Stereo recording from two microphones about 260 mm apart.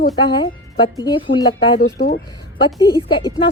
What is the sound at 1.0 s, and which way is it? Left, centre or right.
Speech, centre.